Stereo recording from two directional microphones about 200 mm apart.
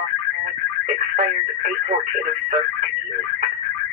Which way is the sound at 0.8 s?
40° right (ahead or behind).